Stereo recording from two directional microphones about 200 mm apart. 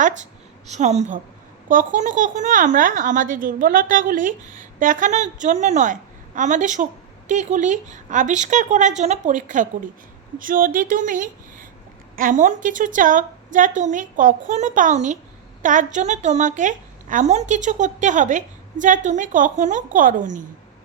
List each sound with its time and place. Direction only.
0.7 s speech: 35° right (ahead or behind)